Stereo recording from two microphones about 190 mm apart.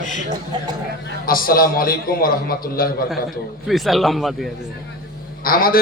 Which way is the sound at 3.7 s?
Centre (ahead or behind).